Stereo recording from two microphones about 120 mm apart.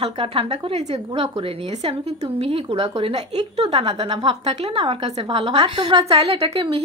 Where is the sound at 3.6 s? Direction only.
60° right (ahead or behind).